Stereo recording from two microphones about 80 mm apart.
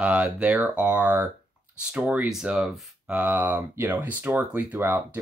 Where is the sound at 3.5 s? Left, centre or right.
Right.